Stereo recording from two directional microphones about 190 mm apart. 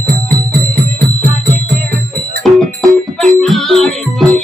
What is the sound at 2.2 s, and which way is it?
Music, centre (ahead or behind).